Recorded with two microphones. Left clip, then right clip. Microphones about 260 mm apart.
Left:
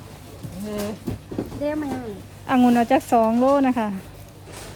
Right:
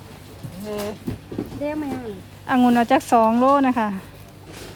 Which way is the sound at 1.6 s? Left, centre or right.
Centre.